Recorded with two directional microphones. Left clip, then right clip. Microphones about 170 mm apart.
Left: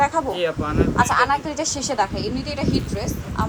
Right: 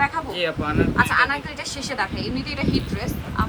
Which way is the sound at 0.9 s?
30° left (ahead or behind).